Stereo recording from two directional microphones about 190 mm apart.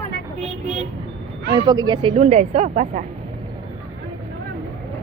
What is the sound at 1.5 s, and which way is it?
Speech, 20° right (ahead or behind).